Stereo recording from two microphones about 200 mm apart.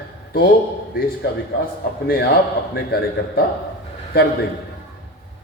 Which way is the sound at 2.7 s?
50° left (ahead or behind).